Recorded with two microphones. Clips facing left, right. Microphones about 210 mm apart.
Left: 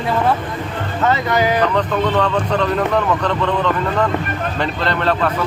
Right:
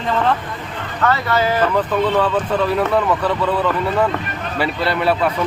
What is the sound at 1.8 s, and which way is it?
Speech, 5° right (ahead or behind).